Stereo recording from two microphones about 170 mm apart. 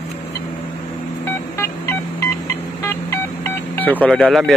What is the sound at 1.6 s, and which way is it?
Telephone dialing, 15° left (ahead or behind).